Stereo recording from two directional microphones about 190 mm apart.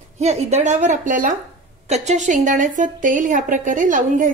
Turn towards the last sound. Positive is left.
turn(degrees=-45)  # may be behind; listen again after turning